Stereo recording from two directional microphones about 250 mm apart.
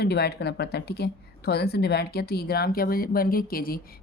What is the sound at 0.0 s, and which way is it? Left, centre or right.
A woman's voice, left.